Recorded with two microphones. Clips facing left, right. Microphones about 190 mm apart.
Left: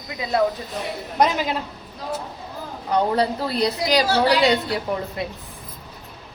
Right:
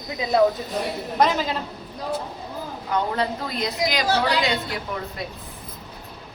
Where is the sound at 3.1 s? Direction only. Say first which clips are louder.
Left 4 dB; 35° left (ahead or behind).